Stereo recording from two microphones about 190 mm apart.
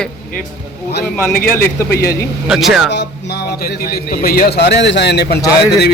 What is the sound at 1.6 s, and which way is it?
Speech, 55° left (ahead or behind).